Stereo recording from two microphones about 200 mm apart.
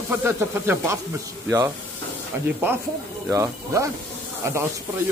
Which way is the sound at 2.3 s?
10° right (ahead or behind).